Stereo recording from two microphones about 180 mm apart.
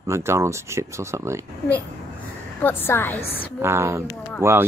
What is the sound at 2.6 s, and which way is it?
Speech, 10° left (ahead or behind).